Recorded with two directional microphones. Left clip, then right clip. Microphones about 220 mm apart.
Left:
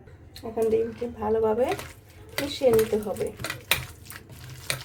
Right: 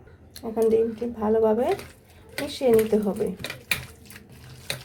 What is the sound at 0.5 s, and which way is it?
Speech, 30° right (ahead or behind).